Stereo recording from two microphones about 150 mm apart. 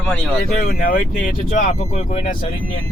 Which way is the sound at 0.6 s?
75° left (ahead or behind).